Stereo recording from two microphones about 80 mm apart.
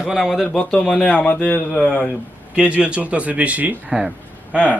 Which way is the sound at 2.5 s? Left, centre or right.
Centre.